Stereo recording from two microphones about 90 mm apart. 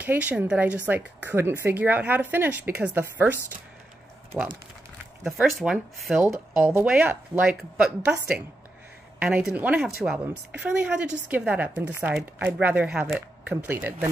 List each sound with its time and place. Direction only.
0.0 s speech: 15° right (ahead or behind)
5.2 s a woman's voice: 5° right (ahead or behind); by 12.1 s 20° right (ahead or behind)
12.1 s speech: 5° right (ahead or behind)
12.4 s speech: 20° right (ahead or behind)